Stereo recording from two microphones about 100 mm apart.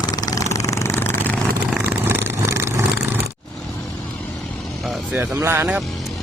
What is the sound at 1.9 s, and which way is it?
Vehicle, 20° right (ahead or behind).